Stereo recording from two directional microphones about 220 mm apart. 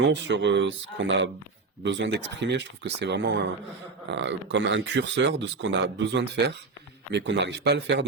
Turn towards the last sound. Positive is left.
turn(degrees=-50)  # may be behind; listen again after turning